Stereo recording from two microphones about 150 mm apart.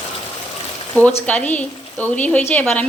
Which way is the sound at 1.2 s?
10° left (ahead or behind).